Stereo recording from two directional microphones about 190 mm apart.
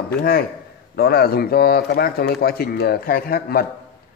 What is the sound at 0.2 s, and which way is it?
A man's voice, 55° left (ahead or behind).